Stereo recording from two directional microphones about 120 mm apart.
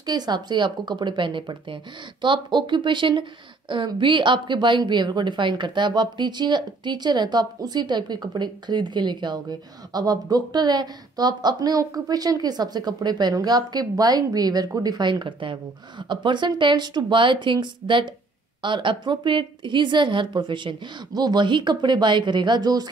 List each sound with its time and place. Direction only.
0.0 s speech: 35° right (ahead or behind)